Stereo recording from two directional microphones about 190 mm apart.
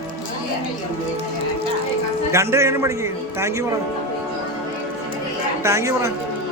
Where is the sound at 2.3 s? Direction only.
15° right (ahead or behind).